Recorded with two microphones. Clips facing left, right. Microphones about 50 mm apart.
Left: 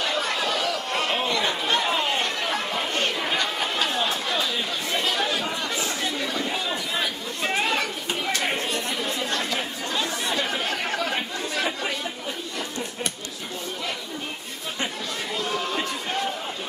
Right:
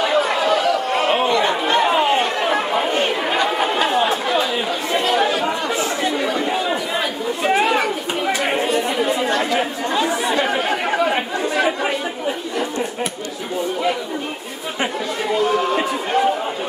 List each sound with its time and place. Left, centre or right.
0.0 s chatter: centre
14.8 s chatter: centre